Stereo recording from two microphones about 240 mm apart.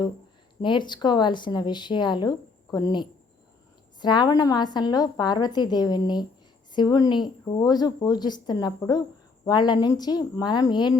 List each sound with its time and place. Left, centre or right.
0.6 s speech: centre